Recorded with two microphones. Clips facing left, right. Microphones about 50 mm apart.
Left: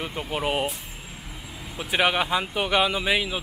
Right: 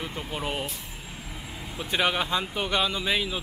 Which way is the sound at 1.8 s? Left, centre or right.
Centre.